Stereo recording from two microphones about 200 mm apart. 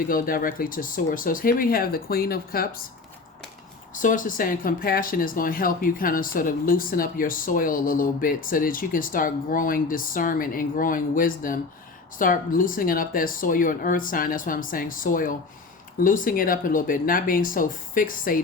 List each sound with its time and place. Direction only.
0.1 s speech: 45° left (ahead or behind)
3.9 s speech: 40° left (ahead or behind)